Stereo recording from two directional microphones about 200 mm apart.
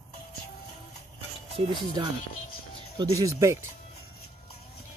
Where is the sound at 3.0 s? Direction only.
15° right (ahead or behind).